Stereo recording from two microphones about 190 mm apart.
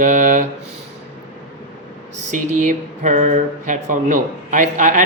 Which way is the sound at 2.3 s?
40° right (ahead or behind).